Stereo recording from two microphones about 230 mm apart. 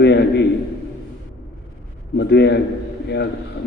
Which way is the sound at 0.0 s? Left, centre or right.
Left.